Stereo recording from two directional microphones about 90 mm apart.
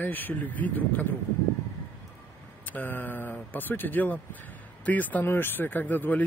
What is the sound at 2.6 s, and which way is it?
Speech, 20° left (ahead or behind).